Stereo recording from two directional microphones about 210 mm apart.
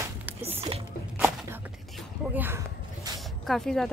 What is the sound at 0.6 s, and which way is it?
Music, 25° right (ahead or behind).